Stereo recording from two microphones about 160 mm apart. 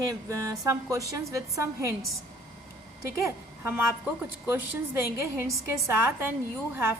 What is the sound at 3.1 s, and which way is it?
A woman's voice, 15° right (ahead or behind).